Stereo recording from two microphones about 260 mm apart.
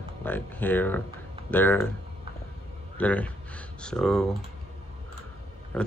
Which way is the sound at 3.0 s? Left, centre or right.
Centre.